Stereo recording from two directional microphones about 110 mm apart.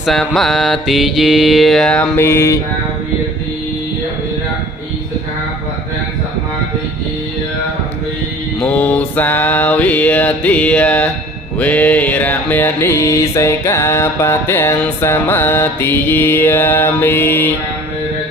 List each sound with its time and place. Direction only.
0.0 s mantra: centre (ahead or behind)
2.1 s mantra: 25° left (ahead or behind)
8.6 s mantra: 15° left (ahead or behind)